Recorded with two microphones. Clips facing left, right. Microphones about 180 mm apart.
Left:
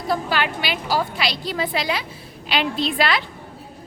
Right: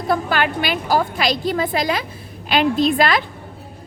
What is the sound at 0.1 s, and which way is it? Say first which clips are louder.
A woman's voice: right 3 dB; 50° right (ahead or behind).